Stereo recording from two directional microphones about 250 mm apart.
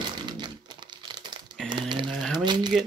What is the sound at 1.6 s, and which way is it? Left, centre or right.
Typing, centre.